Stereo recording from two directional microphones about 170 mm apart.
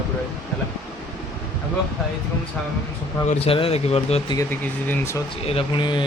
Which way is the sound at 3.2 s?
35° left (ahead or behind).